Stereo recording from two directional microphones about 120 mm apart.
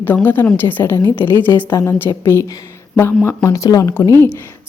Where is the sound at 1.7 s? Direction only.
30° left (ahead or behind).